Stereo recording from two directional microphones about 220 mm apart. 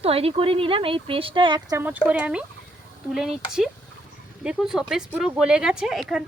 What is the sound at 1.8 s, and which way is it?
Speech, 5° right (ahead or behind).